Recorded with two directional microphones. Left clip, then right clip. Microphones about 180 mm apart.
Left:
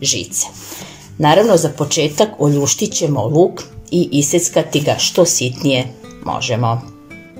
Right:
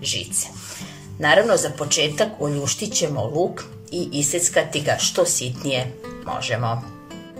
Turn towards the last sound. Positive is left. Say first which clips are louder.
# left 6 dB
turn(degrees=15)  # may be behind; listen again after turning